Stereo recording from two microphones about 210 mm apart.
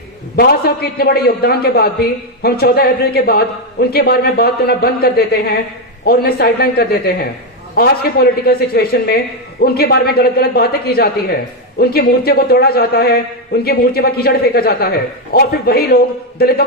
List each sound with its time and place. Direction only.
0.3 s a man's voice: 50° left (ahead or behind)